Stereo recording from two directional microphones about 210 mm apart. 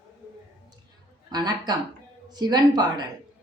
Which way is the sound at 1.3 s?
20° right (ahead or behind).